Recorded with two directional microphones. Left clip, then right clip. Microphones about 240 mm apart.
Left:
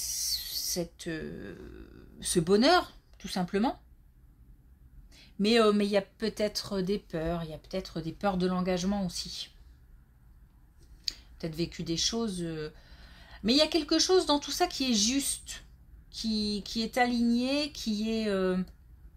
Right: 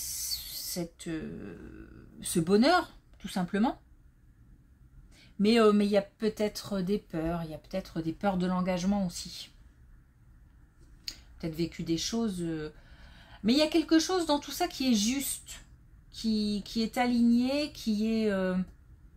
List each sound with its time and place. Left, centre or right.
0.0 s a sound: left
2.1 s speech: left
5.1 s speech: left
11.1 s speech: left